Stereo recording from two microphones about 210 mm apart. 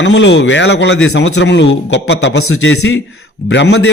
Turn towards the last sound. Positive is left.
turn(degrees=60)  # may be behind; listen again after turning